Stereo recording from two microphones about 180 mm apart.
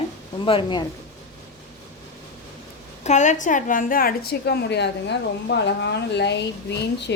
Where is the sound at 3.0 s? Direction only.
40° left (ahead or behind).